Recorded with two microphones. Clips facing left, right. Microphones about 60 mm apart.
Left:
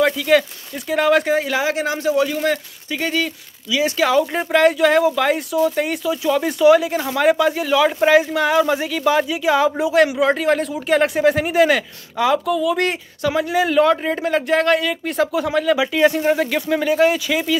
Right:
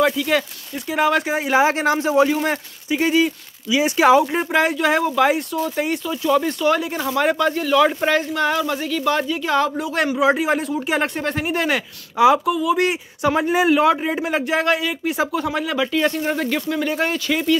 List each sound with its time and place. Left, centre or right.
0.0 s speech: centre
1.5 s speech: right
3.0 s speech: centre
3.6 s speech: right
4.3 s speech: centre
10.3 s speech: centre
12.2 s speech: centre
13.4 s speech: right
13.7 s speech: centre
15.8 s speech: centre